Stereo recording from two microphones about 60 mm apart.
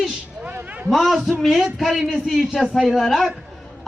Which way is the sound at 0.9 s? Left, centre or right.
Centre.